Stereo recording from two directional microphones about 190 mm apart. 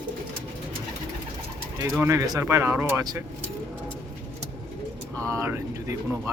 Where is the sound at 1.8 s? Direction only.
15° right (ahead or behind).